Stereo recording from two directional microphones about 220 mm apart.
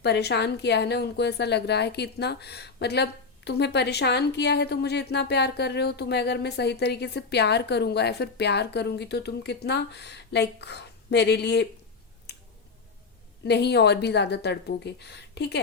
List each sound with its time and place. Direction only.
0.0 s a woman's voice: 50° left (ahead or behind)
12.3 s a sound: 50° left (ahead or behind)
13.4 s a woman's voice: 50° left (ahead or behind)